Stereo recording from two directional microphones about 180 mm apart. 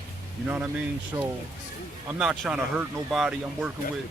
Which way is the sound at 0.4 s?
10° right (ahead or behind).